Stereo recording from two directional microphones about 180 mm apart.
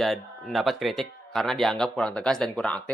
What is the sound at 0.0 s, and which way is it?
Speech, centre (ahead or behind).